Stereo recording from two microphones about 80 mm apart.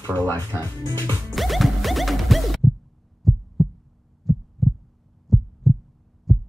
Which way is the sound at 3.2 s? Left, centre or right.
Centre.